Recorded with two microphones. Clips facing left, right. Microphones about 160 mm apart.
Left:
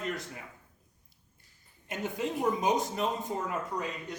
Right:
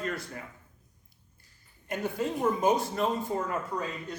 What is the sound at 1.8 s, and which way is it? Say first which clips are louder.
A man's voice: right 2 dB; 20° left (ahead or behind).